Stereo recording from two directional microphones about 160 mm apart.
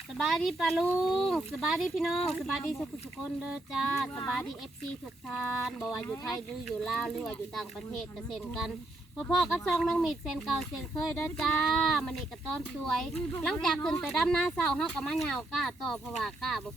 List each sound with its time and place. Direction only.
0.2 s speech: centre (ahead or behind)